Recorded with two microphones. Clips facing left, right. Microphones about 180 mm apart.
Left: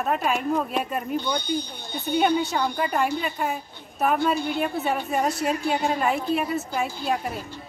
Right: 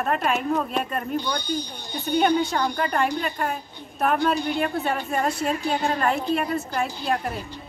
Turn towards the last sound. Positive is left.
turn(degrees=0)  # may be behind; listen again after turning